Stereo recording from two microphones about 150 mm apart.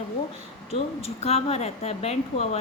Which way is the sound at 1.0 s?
45° left (ahead or behind).